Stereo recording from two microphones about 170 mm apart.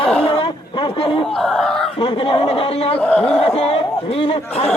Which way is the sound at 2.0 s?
30° left (ahead or behind).